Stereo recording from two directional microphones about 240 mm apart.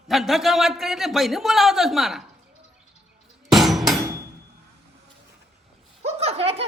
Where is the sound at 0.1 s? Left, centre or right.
Centre.